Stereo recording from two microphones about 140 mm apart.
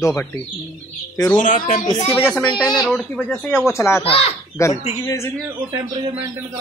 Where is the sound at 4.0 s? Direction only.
40° left (ahead or behind).